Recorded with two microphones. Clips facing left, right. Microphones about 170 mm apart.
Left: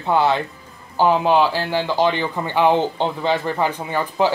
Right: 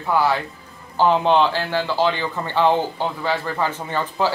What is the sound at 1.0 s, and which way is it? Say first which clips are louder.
Speech: left 1 dB; 10° left (ahead or behind).